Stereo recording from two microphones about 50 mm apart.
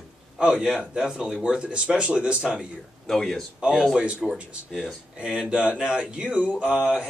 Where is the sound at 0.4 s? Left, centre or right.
Centre.